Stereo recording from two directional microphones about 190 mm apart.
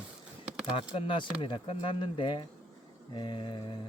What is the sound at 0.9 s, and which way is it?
Speech, 25° left (ahead or behind).